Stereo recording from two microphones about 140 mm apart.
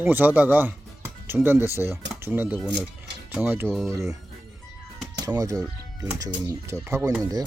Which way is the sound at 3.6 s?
Centre (ahead or behind).